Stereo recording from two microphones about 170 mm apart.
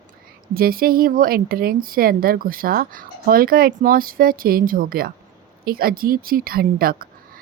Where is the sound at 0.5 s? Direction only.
60° right (ahead or behind).